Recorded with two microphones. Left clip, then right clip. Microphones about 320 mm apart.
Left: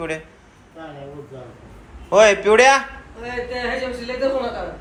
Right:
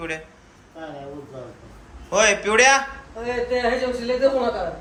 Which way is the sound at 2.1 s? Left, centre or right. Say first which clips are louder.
Left 5 dB; centre.